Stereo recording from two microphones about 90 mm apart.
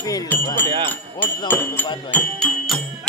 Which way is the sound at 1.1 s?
20° left (ahead or behind).